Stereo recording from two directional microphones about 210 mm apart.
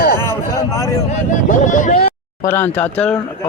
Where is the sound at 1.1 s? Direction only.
35° left (ahead or behind).